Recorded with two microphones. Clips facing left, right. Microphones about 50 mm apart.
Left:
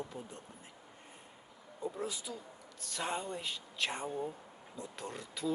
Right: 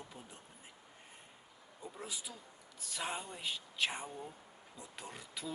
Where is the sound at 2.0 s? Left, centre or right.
Centre.